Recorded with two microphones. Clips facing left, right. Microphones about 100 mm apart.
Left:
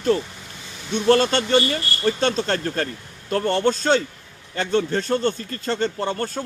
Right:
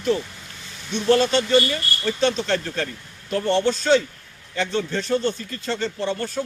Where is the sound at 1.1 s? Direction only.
55° left (ahead or behind).